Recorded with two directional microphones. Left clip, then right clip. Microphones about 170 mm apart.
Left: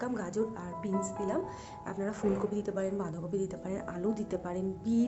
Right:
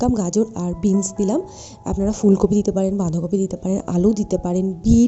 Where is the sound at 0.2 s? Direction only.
55° right (ahead or behind).